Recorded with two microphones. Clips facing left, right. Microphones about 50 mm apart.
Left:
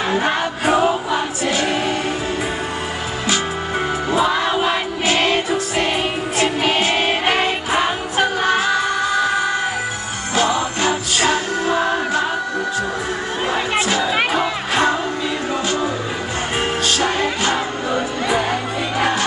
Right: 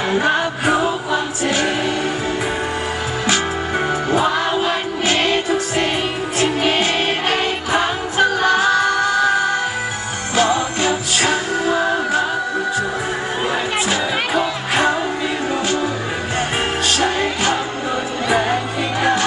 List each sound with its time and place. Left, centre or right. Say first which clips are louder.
4.6 s music: even; left
6.6 s music: even; left
10.3 s music: right 1 dB; right
17.0 s music: right 1 dB; right